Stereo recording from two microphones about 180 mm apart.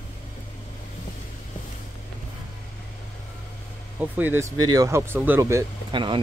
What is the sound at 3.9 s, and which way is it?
Speech, 10° right (ahead or behind).